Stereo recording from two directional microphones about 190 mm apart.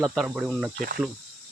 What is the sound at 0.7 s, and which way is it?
Speech, 50° right (ahead or behind).